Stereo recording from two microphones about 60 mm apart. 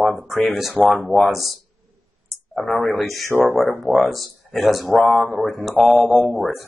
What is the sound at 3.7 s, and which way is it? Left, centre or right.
Speech, left.